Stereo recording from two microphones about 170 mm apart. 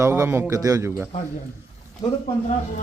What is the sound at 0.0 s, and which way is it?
Speech, 15° right (ahead or behind).